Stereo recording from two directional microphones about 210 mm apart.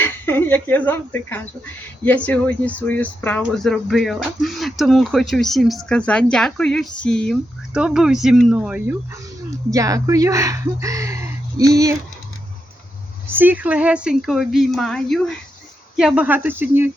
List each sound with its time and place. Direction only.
0.0 s a sound: 10° left (ahead or behind)
2.0 s speech: 5° left (ahead or behind); by 11.9 s 15° right (ahead or behind)
13.2 s speech: 10° right (ahead or behind)